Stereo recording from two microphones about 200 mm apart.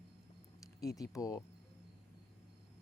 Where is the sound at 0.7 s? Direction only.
15° left (ahead or behind).